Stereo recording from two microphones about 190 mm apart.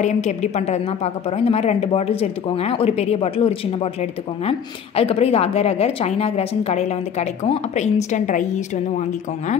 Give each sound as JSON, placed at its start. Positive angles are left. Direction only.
{"t": 0.0, "sound": "a woman's voice", "side_deg": 40}